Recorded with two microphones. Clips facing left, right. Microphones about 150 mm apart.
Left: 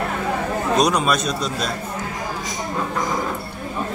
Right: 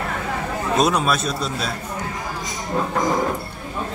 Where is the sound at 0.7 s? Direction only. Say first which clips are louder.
Even; 5° right (ahead or behind).